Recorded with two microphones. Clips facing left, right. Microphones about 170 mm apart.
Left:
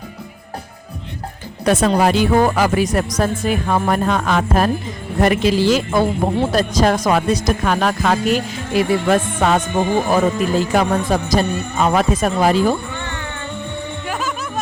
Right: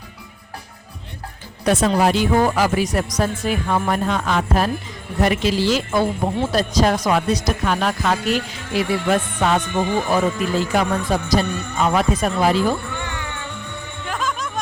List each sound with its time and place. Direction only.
1.6 s speech: 55° left (ahead or behind)
13.0 s music: 10° right (ahead or behind)
14.1 s music: 5° left (ahead or behind)